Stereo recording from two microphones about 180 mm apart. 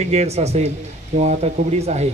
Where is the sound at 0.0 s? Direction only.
35° right (ahead or behind).